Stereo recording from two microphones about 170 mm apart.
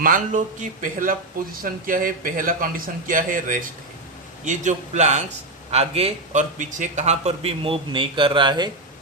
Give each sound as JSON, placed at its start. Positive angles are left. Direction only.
{"t": 0.0, "sound": "a man's voice", "side_deg": -50}